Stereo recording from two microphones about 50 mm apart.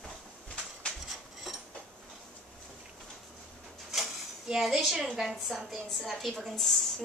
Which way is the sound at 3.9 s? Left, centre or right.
Centre.